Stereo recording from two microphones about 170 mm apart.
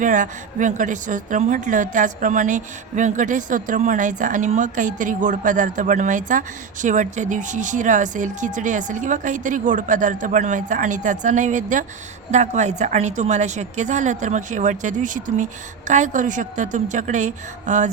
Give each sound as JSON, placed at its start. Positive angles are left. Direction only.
{"t": 0.0, "sound": "speech", "side_deg": -50}